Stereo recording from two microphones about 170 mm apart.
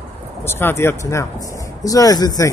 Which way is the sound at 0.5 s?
15° left (ahead or behind).